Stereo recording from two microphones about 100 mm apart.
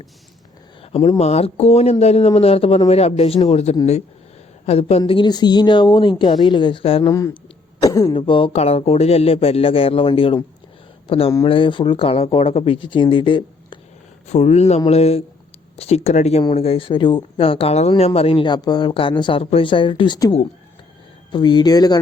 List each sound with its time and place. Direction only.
1.2 s speech: 90° left; by 7.1 s 65° left (ahead or behind)
7.1 s speech: 30° left (ahead or behind)
7.8 s throat clearing: 35° left (ahead or behind)
8.1 s a man's voice: 60° left (ahead or behind)
14.3 s speech: 90° left
16.6 s speech: 75° left (ahead or behind); by 17.4 s 50° left (ahead or behind)
17.4 s a man's voice: 70° left (ahead or behind)
18.5 s speech: 45° left (ahead or behind)
19.4 s speech: 75° left (ahead or behind); by 20.1 s 60° left (ahead or behind)
21.3 s speech: 50° left (ahead or behind)